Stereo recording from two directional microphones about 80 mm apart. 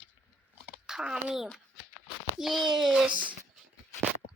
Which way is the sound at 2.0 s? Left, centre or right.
Centre.